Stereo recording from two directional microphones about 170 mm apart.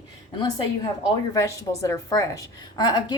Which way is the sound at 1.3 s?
20° left (ahead or behind).